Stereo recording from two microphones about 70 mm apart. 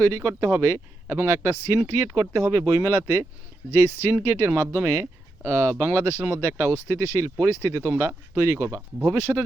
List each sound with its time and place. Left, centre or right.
0.0 s speech: right